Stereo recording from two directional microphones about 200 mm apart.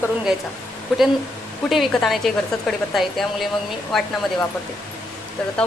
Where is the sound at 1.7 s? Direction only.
Centre (ahead or behind).